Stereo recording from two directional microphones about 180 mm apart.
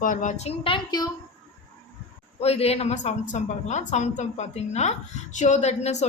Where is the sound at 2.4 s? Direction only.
35° left (ahead or behind).